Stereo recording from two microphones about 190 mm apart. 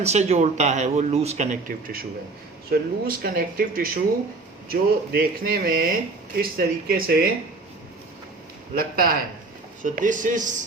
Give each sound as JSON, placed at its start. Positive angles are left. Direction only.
{"t": 0.0, "sound": "speech", "side_deg": -35}
{"t": 8.7, "sound": "speech", "side_deg": -50}